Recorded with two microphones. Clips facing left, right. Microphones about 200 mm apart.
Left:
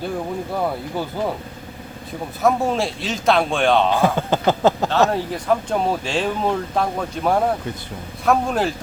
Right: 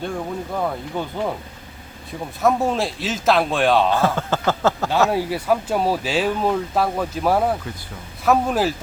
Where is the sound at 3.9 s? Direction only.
15° left (ahead or behind).